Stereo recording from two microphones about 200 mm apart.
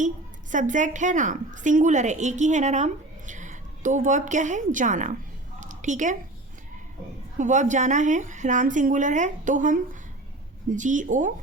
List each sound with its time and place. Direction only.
0.5 s a woman's voice: 40° right (ahead or behind)
5.5 s a sound: 40° right (ahead or behind)
7.3 s a woman's voice: 40° right (ahead or behind)